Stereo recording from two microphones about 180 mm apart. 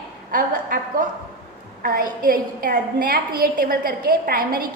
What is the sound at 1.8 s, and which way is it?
A woman's voice, 55° right (ahead or behind).